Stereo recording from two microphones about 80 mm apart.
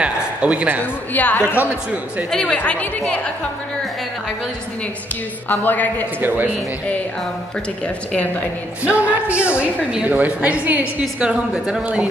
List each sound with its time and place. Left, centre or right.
0.0 s a sound: centre
1.1 s a man's voice: left
1.6 s a man's voice: centre
2.3 s a woman's voice: centre
5.5 s a man's voice: left
6.2 s a man's voice: right
7.8 s a woman's voice: centre
8.8 s a woman's voice: centre